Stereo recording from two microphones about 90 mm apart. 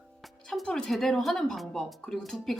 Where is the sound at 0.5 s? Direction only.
10° left (ahead or behind).